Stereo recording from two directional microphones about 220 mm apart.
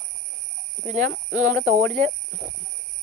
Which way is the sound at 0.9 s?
35° right (ahead or behind).